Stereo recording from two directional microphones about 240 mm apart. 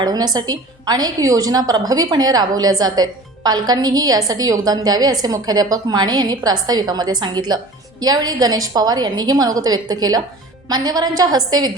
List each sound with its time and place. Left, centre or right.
0.0 s a woman's voice: centre